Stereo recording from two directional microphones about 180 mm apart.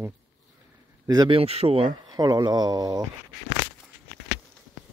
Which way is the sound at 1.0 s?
20° right (ahead or behind).